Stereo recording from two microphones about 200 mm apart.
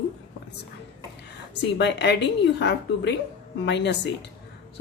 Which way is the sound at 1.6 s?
60° left (ahead or behind).